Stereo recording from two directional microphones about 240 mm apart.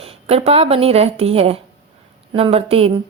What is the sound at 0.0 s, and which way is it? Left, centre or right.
A woman's voice, right.